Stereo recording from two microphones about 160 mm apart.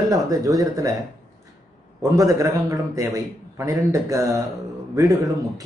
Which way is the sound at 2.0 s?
20° right (ahead or behind).